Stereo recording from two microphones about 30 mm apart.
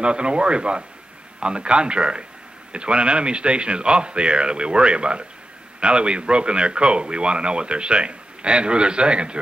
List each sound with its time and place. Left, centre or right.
0.0 s speech: right